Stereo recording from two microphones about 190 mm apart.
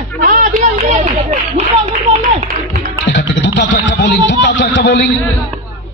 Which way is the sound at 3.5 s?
60° left (ahead or behind).